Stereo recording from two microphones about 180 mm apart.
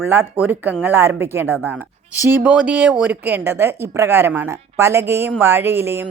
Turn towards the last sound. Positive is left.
turn(degrees=-15)  # may be behind; listen again after turning